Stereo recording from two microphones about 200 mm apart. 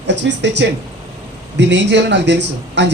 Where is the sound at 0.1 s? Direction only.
60° right (ahead or behind).